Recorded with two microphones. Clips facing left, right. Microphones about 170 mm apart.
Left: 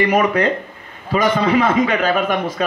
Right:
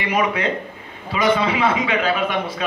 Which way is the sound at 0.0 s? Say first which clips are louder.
Left 5 dB; 45° left (ahead or behind).